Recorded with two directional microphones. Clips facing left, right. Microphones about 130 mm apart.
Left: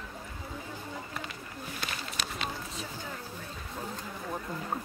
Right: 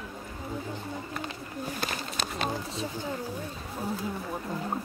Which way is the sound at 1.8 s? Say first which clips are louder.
Right 4 dB; 40° right (ahead or behind).